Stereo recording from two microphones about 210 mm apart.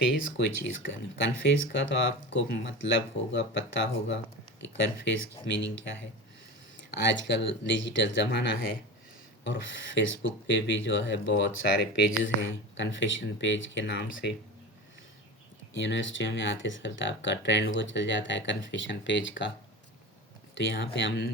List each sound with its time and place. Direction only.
0.2 s speech: 55° left (ahead or behind)
15.7 s speech: 60° left (ahead or behind)
20.6 s speech: 60° left (ahead or behind)